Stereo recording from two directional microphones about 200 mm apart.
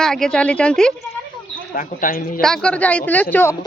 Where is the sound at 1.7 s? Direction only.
45° left (ahead or behind).